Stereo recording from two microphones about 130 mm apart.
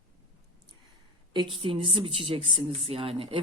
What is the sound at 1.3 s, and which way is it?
Speech, 40° right (ahead or behind).